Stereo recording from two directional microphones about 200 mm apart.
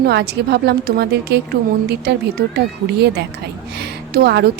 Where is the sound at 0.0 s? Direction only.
55° right (ahead or behind).